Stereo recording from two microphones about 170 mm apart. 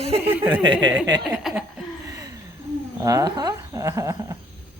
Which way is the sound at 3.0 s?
20° right (ahead or behind).